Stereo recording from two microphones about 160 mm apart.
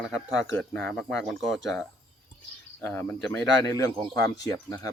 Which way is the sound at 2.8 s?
10° left (ahead or behind).